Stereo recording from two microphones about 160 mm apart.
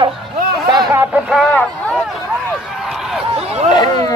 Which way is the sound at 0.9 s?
10° right (ahead or behind).